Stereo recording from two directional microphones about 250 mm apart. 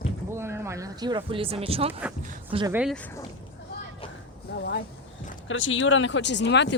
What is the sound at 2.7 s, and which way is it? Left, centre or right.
Speech, centre.